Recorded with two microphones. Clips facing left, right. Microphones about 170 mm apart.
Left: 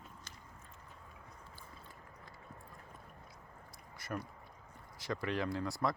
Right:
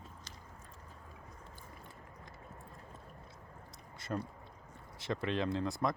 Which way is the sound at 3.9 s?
25° right (ahead or behind).